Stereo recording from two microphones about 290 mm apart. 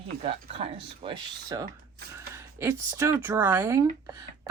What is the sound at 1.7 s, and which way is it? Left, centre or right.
Mechanisms, right.